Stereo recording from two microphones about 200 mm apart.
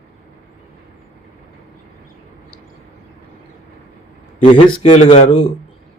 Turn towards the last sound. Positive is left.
turn(degrees=30)  # may be behind; listen again after turning